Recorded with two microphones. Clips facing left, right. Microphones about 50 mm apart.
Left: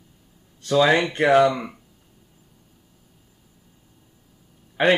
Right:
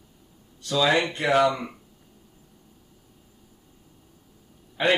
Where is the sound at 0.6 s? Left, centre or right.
Left.